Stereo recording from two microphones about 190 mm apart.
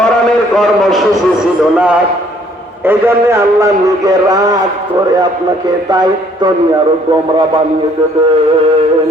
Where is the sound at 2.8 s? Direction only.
10° right (ahead or behind).